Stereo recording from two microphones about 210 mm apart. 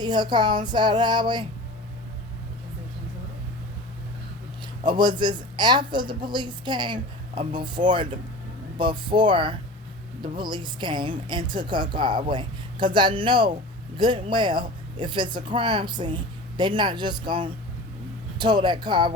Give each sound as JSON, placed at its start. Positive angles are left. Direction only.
{"t": 0.0, "sound": "a woman's voice", "side_deg": -20}
{"t": 4.8, "sound": "a woman's voice", "side_deg": -20}